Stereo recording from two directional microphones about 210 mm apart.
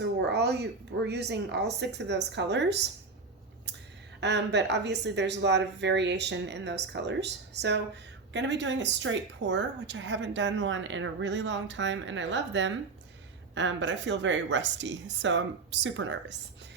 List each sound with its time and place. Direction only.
0.0 s speech: 55° right (ahead or behind)
4.2 s a woman's voice: 55° right (ahead or behind)